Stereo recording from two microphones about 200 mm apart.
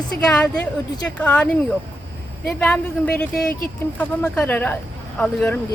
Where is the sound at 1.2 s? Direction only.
5° left (ahead or behind).